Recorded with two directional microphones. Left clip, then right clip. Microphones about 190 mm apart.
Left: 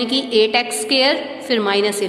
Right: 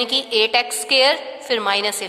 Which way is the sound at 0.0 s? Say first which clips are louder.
Left 2 dB; 25° right (ahead or behind).